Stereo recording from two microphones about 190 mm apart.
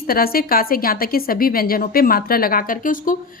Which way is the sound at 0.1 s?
50° left (ahead or behind).